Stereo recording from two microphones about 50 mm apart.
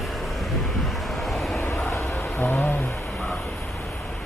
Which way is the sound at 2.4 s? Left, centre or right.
Left.